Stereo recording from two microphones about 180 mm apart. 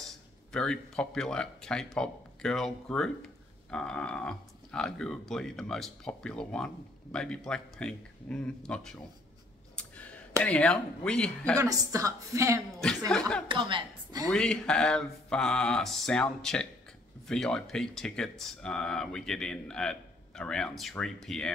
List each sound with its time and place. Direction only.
0.5 s speech: 5° left (ahead or behind)
10.4 s speech: 5° left (ahead or behind)
11.5 s speech: 15° right (ahead or behind)
13.1 s speech: 5° left (ahead or behind)
13.5 s a woman's voice: 25° right (ahead or behind)
14.3 s speech: 5° left (ahead or behind)